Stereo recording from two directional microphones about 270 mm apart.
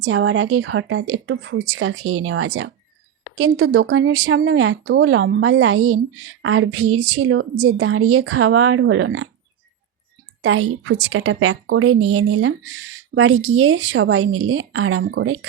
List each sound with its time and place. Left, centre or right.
0.0 s speech: right
10.4 s speech: right